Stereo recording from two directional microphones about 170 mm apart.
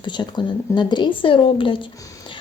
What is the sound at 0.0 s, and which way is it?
Speech, 25° left (ahead or behind).